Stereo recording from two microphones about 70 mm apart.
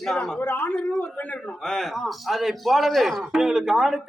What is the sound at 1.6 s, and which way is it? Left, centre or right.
Speech, centre.